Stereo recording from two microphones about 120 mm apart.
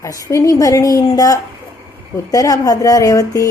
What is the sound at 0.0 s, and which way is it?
A woman's voice, 25° left (ahead or behind).